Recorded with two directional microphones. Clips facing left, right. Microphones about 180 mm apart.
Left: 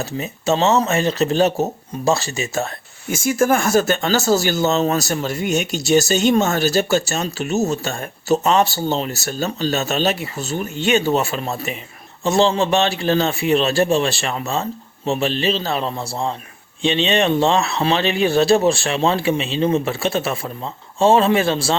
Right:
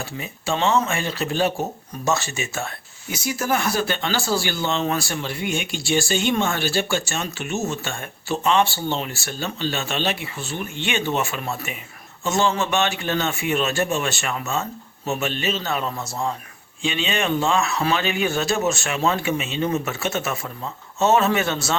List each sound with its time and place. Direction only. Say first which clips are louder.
0.0 s a man's voice: left 7 dB; 40° left (ahead or behind)